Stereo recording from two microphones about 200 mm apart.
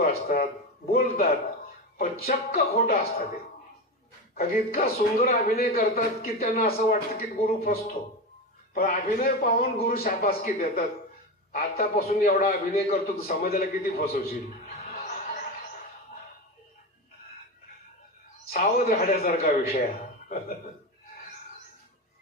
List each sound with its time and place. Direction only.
0.0 s a man's voice: 45° left (ahead or behind)
2.0 s a man's voice: 40° left (ahead or behind)
4.4 s a man's voice: 45° left (ahead or behind)
13.2 s a man's voice: 45° left (ahead or behind)
18.5 s a man's voice: 45° left (ahead or behind)